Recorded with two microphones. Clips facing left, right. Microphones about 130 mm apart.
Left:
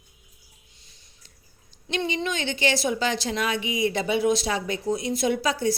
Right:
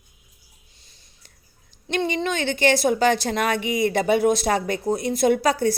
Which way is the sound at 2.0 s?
45° right (ahead or behind).